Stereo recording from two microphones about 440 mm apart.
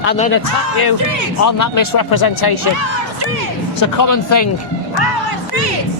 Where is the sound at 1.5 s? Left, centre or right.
Left.